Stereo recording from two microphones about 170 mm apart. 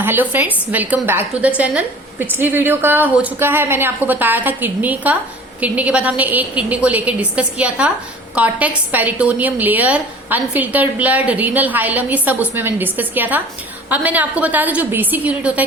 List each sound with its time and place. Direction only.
0.0 s a woman's voice: 10° right (ahead or behind)